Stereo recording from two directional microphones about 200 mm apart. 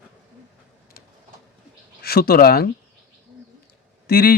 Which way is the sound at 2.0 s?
50° left (ahead or behind).